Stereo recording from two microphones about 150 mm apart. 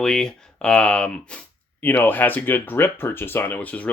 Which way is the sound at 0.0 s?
5° left (ahead or behind).